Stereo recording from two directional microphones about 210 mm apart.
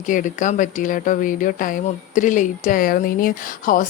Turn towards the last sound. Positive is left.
turn(degrees=40)  # may be behind; listen again after turning